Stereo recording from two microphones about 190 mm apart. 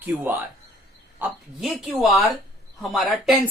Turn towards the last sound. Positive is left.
turn(degrees=0)  # may be behind; listen again after turning